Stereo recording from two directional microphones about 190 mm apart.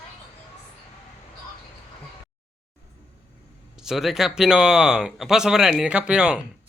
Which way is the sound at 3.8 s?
Centre (ahead or behind).